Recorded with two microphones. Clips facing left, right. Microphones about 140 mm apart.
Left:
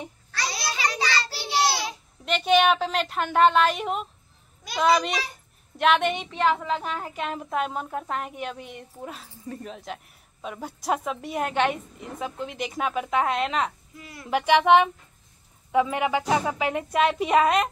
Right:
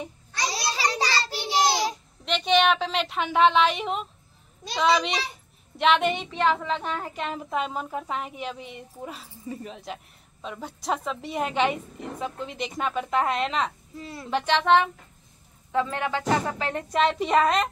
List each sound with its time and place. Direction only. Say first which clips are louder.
0.3 s a sound: right 2 dB; 20° right (ahead or behind)
0.9 s child singing: right 1 dB; 35° right (ahead or behind)
1.3 s child singing: right 3 dB; 20° right (ahead or behind)
2.2 s speech: left 1 dB; 5° left (ahead or behind)
5.3 s speech: right 1 dB; centre (ahead or behind)
13.9 s a woman's voice: right 6 dB; 30° right (ahead or behind)
14.3 s a woman's voice: left 3 dB; 10° left (ahead or behind)